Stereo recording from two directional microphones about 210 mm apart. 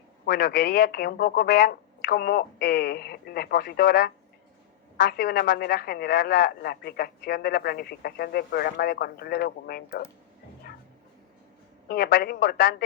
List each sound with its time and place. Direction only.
0.3 s speech: 50° left (ahead or behind)
10.7 s a sound: 50° left (ahead or behind)
11.9 s speech: 50° left (ahead or behind)